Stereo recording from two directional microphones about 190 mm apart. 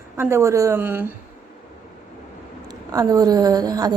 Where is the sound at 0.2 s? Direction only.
15° right (ahead or behind).